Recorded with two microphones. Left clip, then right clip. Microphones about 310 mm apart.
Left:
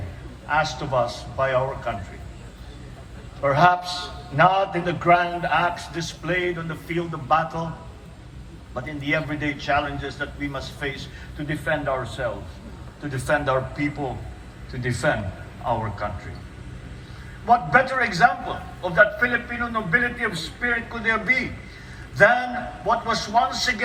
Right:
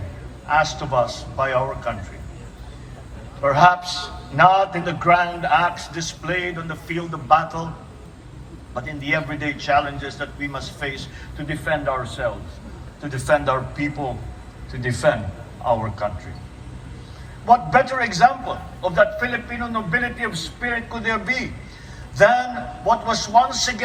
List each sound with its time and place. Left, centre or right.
0.4 s a man's voice: centre
3.4 s a man's voice: centre
8.7 s a man's voice: centre
17.4 s a man's voice: centre